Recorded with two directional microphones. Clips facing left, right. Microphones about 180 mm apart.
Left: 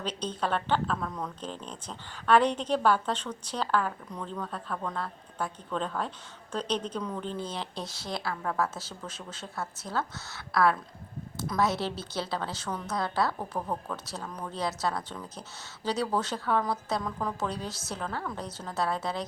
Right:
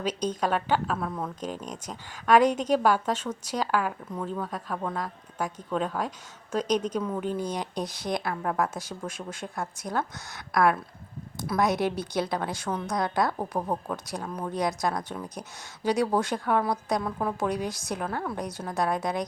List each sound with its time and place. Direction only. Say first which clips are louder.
0.0 s a woman's voice: right 4 dB; 10° right (ahead or behind)